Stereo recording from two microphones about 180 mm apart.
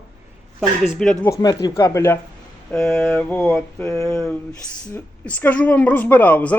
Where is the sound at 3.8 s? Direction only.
15° left (ahead or behind).